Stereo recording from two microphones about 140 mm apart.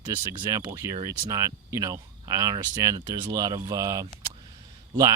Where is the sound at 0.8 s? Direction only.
20° right (ahead or behind).